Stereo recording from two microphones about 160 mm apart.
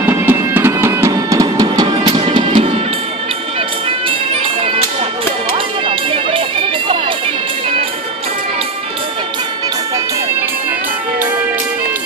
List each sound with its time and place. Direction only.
0.0 s music: 15° right (ahead or behind)
2.2 s music: 35° right (ahead or behind)
5.9 s music: 35° right (ahead or behind)